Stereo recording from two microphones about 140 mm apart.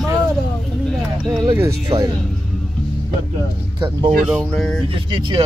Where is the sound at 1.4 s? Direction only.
20° right (ahead or behind).